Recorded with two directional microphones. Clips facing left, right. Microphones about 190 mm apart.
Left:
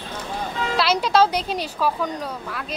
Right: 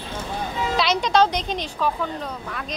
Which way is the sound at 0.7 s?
5° left (ahead or behind).